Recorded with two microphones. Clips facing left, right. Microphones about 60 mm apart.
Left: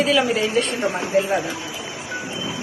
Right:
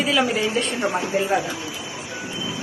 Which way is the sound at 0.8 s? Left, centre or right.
Right.